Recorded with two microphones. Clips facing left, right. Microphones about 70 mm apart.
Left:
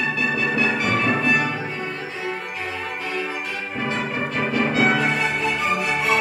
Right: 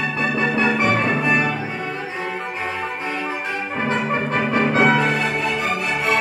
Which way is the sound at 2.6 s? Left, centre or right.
Right.